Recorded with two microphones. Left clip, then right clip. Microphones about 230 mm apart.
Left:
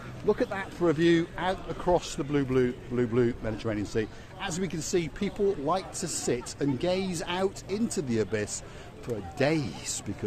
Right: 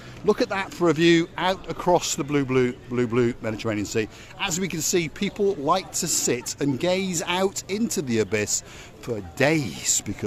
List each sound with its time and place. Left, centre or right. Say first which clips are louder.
0.3 s speech: right 5 dB; right